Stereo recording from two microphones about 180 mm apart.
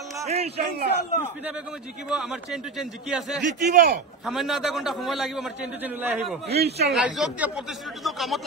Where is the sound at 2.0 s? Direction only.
5° right (ahead or behind).